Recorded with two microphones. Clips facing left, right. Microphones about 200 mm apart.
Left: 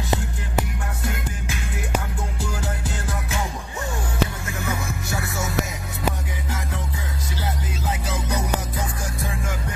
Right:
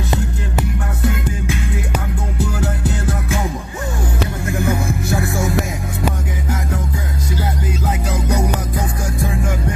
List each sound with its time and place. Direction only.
4.5 s music: 50° right (ahead or behind)
8.1 s music: 45° right (ahead or behind)